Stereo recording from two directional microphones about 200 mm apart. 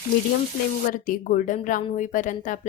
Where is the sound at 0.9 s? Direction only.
45° left (ahead or behind).